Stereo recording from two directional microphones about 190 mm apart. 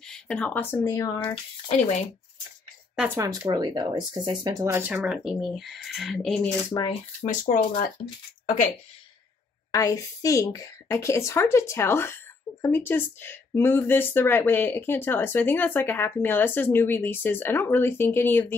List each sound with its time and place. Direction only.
0.0 s speech: 5° left (ahead or behind)
1.3 s speech: 35° left (ahead or behind)
3.2 s speech: 20° right (ahead or behind); by 6.5 s centre (ahead or behind)
6.7 s speech: 20° left (ahead or behind)
7.5 s speech: 40° left (ahead or behind)
9.7 s speech: 15° left (ahead or behind)